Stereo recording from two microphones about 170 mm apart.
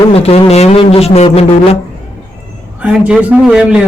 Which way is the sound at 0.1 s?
35° left (ahead or behind).